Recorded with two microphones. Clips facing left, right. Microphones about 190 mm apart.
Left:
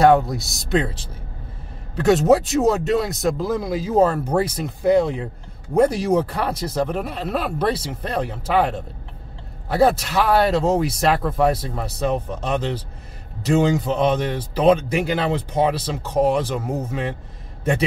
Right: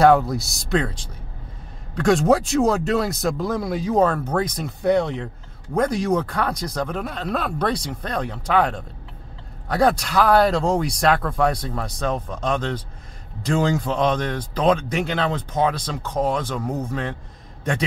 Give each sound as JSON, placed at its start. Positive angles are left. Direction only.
{"t": 0.0, "sound": "speech", "side_deg": 0}
{"t": 2.0, "sound": "a man's voice", "side_deg": 5}